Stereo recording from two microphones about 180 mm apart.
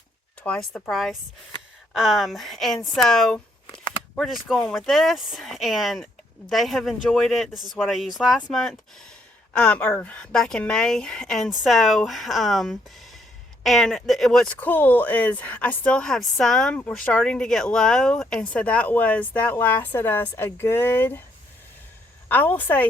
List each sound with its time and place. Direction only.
0.4 s speech: 5° left (ahead or behind)
3.7 s a sound: 25° left (ahead or behind)
4.1 s speech: 5° left (ahead or behind)
22.3 s a woman's voice: 10° left (ahead or behind)